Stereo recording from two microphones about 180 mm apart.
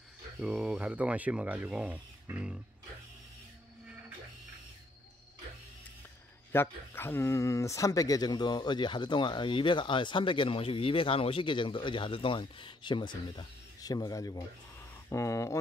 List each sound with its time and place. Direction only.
0.4 s speech: 5° right (ahead or behind)
6.5 s speech: 10° left (ahead or behind)